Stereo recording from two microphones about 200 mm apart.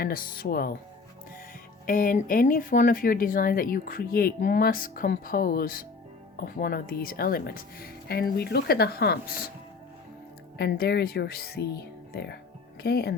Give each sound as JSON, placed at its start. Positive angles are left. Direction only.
{"t": 0.0, "sound": "speech", "side_deg": 45}
{"t": 1.9, "sound": "speech", "side_deg": 45}
{"t": 10.6, "sound": "speech", "side_deg": 55}